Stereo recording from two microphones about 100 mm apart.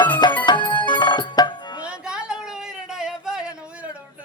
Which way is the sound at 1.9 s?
10° right (ahead or behind).